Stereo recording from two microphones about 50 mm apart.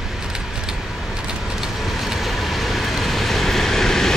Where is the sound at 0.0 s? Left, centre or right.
Centre.